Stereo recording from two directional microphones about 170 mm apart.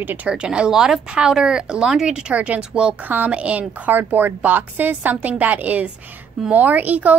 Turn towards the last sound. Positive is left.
turn(degrees=-10)  # may be behind; listen again after turning